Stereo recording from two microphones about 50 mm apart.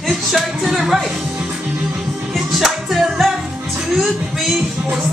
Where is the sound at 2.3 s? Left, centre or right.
Centre.